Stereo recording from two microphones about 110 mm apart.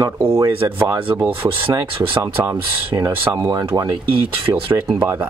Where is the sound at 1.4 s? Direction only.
50° right (ahead or behind).